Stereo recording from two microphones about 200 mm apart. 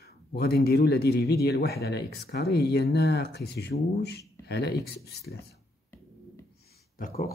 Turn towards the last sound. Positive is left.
turn(degrees=45)  # may be behind; listen again after turning